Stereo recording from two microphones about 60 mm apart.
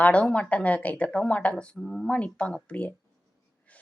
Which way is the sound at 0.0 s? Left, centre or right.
Centre.